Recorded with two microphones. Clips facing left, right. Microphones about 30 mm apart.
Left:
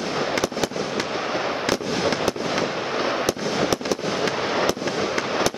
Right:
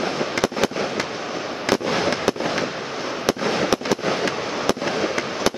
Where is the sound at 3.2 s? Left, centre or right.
Right.